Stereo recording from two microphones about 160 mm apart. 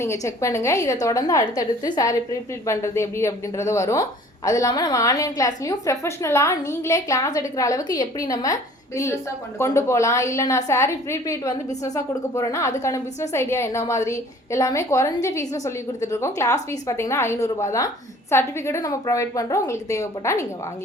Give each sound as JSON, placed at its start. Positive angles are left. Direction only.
{"t": 0.0, "sound": "a woman's voice", "side_deg": 15}